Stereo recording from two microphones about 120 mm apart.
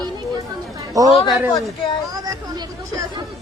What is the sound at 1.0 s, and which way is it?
Speech, 30° right (ahead or behind).